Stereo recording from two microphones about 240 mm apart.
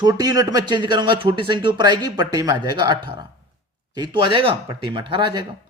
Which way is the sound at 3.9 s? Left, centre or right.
Centre.